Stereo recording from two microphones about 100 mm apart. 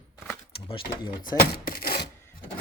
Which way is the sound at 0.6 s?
60° left (ahead or behind).